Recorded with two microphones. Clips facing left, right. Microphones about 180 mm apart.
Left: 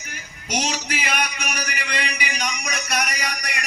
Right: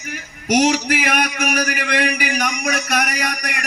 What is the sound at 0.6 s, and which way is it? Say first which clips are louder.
A man's voice: right 10 dB; 60° right (ahead or behind).